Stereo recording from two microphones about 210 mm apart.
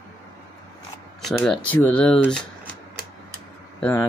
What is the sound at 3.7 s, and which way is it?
Speech, 5° left (ahead or behind).